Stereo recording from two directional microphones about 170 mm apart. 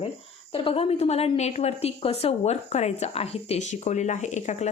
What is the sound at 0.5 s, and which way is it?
A woman's voice, 35° left (ahead or behind).